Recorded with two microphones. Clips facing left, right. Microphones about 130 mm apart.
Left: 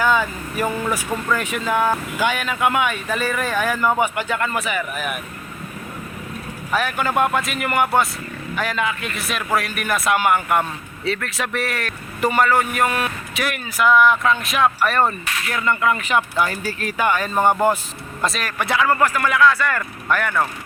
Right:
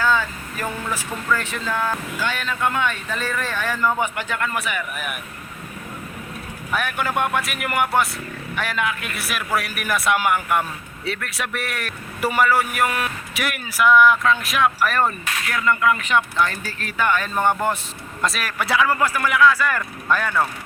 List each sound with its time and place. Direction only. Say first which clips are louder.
0.0 s speech: left 2 dB; 15° left (ahead or behind); by 4.8 s centre (ahead or behind)
6.7 s a man's voice: left 3 dB; centre (ahead or behind)
18.2 s a man's voice: left 1 dB; centre (ahead or behind)
18.6 s speech: even; 20° left (ahead or behind)
19.0 s speech: left 1 dB; 10° right (ahead or behind)